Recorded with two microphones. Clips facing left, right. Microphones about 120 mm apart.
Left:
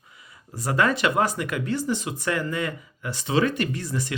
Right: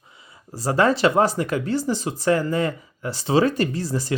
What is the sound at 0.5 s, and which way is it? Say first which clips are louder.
Speech: right 4 dB; 30° right (ahead or behind).